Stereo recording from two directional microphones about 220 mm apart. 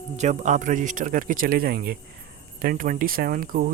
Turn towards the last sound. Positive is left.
turn(degrees=-40)  # may be behind; listen again after turning